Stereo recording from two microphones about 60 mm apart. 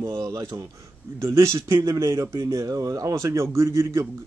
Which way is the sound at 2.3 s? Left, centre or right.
Right.